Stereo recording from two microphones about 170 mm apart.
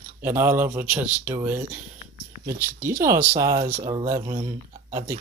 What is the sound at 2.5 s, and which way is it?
Speech, 15° right (ahead or behind).